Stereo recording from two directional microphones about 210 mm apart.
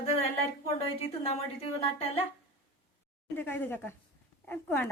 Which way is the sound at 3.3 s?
10° left (ahead or behind).